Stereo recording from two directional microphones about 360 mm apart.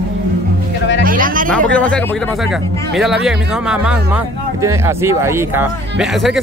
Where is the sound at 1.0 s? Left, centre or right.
Right.